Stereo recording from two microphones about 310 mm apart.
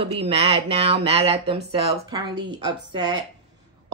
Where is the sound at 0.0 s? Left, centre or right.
Centre.